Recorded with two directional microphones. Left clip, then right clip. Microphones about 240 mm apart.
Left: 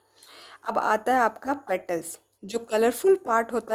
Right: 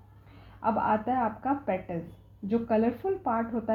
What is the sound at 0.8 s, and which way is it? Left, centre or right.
Speech, left.